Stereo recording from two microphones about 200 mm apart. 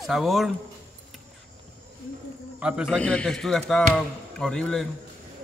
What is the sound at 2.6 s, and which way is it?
Speech, 5° right (ahead or behind).